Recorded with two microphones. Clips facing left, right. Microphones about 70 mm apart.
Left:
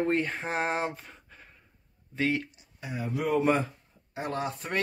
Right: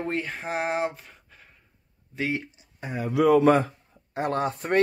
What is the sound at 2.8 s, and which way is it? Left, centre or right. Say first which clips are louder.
Speech: right 4 dB; right.